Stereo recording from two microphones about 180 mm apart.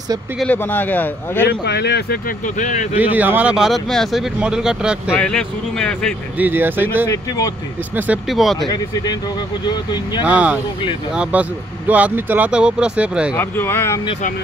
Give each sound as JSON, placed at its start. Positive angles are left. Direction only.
{"t": 0.4, "sound": "a man's voice", "side_deg": 10}
{"t": 1.5, "sound": "speech", "side_deg": 65}
{"t": 3.0, "sound": "speech", "side_deg": -10}
{"t": 6.3, "sound": "speech", "side_deg": -10}
{"t": 7.1, "sound": "speech", "side_deg": 20}
{"t": 7.9, "sound": "speech", "side_deg": -5}
{"t": 8.6, "sound": "speech", "side_deg": 20}
{"t": 10.2, "sound": "speech", "side_deg": -5}
{"t": 13.3, "sound": "a man's voice", "side_deg": 10}